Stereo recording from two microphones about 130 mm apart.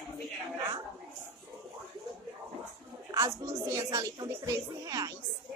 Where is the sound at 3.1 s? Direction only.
25° right (ahead or behind).